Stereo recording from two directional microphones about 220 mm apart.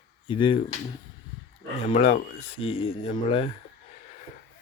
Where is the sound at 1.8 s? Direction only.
30° left (ahead or behind).